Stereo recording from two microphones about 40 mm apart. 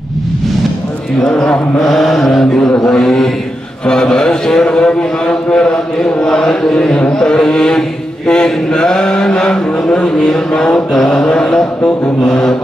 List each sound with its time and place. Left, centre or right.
1.8 s mantra: centre
3.8 s a man's voice: centre
10.9 s mantra: centre